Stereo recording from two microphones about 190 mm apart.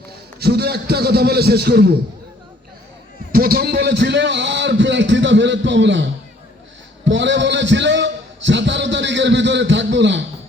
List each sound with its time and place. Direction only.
0.3 s a man's voice: 55° right (ahead or behind)
3.3 s a man's voice: 50° right (ahead or behind); by 6.1 s 70° right (ahead or behind)
7.0 s a sound: 70° right (ahead or behind)